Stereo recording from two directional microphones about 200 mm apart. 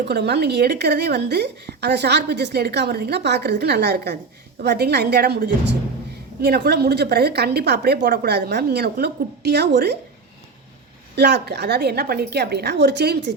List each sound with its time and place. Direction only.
0.0 s a woman's voice: 55° right (ahead or behind)
11.1 s a woman's voice: 55° right (ahead or behind)